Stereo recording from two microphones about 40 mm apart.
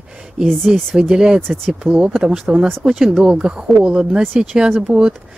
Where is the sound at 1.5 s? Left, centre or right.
Right.